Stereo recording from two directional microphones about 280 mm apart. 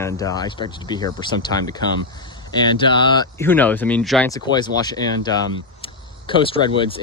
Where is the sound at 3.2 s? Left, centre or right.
Centre.